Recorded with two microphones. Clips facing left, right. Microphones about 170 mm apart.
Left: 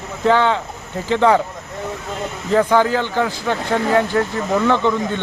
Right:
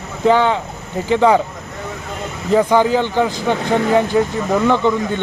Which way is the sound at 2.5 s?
15° right (ahead or behind).